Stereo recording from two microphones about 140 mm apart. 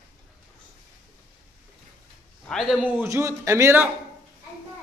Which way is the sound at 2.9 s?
20° right (ahead or behind).